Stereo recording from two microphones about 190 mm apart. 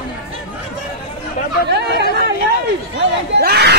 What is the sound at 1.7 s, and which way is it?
Chatter, 60° right (ahead or behind).